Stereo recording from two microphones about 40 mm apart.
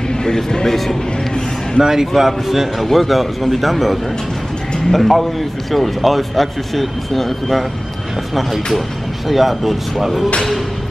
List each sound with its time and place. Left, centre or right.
0.2 s speech: centre
1.8 s a man's voice: centre
2.8 s speech: centre
9.3 s speech: centre